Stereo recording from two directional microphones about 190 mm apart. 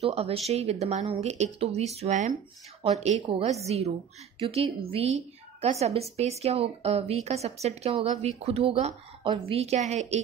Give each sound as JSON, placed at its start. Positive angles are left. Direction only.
{"t": 0.0, "sound": "a woman's voice", "side_deg": -30}